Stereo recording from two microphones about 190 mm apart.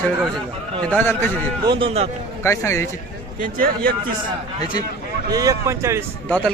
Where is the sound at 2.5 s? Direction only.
15° left (ahead or behind).